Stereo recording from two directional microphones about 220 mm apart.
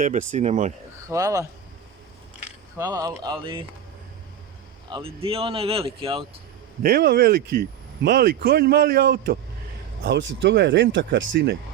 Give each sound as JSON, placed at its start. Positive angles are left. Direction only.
{"t": 0.0, "sound": "speech", "side_deg": -35}
{"t": 1.0, "sound": "speech", "side_deg": -15}
{"t": 2.7, "sound": "speech", "side_deg": -15}
{"t": 4.9, "sound": "speech", "side_deg": -25}
{"t": 6.8, "sound": "speech", "side_deg": -45}